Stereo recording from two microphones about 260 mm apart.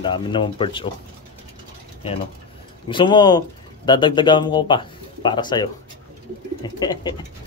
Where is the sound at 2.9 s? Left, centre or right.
Centre.